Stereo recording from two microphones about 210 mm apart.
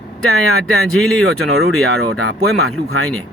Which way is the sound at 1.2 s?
80° right.